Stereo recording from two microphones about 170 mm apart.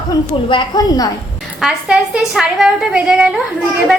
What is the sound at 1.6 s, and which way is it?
A woman's voice, 5° right (ahead or behind).